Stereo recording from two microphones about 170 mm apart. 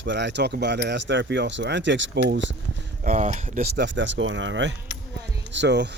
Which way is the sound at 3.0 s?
50° right (ahead or behind).